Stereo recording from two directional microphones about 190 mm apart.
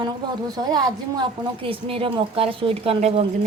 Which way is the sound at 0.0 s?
20° right (ahead or behind).